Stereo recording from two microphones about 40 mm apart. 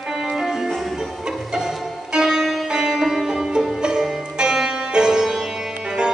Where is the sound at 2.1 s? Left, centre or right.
Centre.